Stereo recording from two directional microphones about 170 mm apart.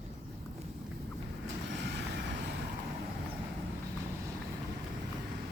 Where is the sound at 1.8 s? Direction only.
90° right.